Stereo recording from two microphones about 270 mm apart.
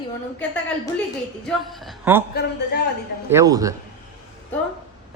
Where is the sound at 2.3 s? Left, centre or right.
Left.